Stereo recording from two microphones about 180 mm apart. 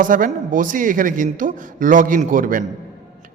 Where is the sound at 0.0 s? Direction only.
50° right (ahead or behind).